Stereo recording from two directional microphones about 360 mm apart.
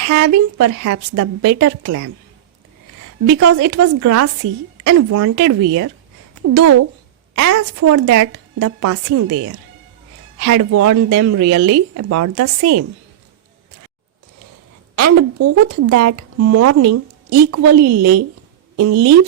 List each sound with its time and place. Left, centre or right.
0.0 s speech: right
3.4 s speech: right
14.9 s speech: right